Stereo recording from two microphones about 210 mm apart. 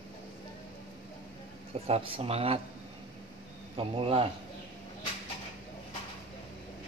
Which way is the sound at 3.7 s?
25° right (ahead or behind).